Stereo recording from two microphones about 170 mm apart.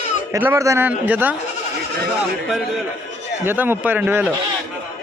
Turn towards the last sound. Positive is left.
turn(degrees=-10)  # may be behind; listen again after turning